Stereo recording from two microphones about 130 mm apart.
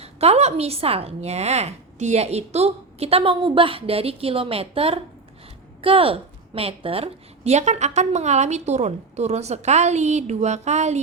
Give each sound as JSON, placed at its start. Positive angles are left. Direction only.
{"t": 0.0, "sound": "a woman's voice", "side_deg": -50}